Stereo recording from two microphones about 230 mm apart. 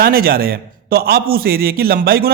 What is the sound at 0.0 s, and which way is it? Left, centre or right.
A man's voice, right.